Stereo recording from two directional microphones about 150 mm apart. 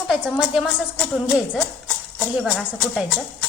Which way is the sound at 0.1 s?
5° right (ahead or behind).